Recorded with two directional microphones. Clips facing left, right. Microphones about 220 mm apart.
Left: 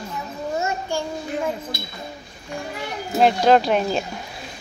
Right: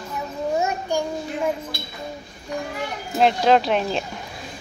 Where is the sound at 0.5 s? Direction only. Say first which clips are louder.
Right 1 dB; 15° right (ahead or behind).